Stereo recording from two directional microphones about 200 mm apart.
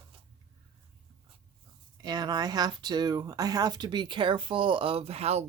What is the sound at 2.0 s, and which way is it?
Speech, 20° right (ahead or behind).